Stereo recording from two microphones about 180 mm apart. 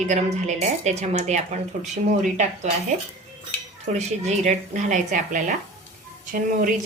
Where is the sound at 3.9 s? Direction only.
40° right (ahead or behind).